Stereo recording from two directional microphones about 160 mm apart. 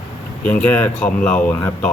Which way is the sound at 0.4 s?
10° left (ahead or behind).